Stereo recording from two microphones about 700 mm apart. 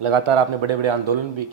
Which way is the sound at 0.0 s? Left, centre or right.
Right.